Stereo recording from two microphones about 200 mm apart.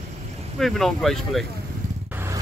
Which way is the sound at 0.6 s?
Centre (ahead or behind).